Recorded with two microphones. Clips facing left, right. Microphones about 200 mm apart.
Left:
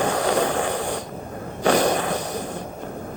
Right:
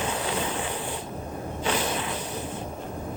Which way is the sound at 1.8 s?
45° left (ahead or behind).